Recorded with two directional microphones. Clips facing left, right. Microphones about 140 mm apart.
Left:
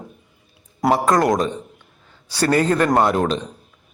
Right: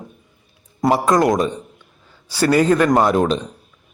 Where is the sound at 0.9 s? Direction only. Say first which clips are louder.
Right 1 dB; 5° right (ahead or behind).